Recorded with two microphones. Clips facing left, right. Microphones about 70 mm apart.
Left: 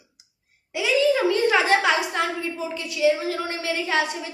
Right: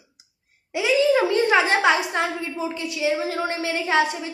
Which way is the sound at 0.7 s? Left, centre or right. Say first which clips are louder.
Right 2 dB; right.